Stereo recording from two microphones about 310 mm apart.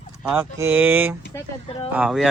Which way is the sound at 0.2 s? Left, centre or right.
Centre.